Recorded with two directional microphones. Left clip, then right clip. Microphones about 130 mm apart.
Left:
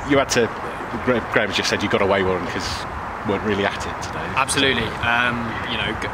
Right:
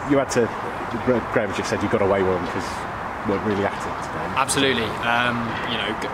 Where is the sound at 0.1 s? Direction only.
35° left (ahead or behind).